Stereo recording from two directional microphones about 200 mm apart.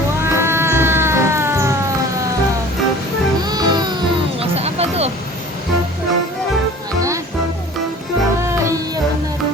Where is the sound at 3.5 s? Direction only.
20° right (ahead or behind).